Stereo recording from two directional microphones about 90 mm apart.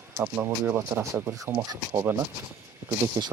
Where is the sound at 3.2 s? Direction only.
45° right (ahead or behind).